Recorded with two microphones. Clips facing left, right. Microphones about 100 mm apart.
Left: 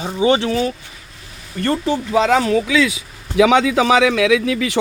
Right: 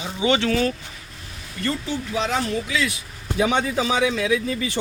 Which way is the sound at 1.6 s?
70° left (ahead or behind).